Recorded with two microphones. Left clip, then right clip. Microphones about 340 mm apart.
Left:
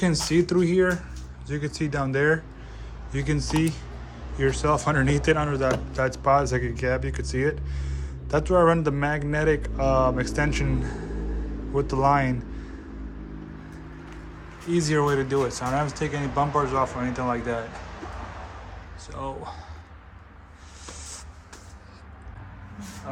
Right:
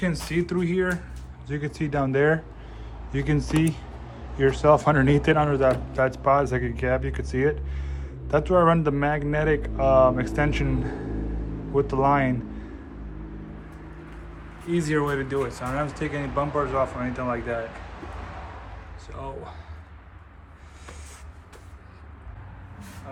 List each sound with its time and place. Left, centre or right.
0.0 s a man's voice: centre
14.7 s a man's voice: centre
19.1 s speech: centre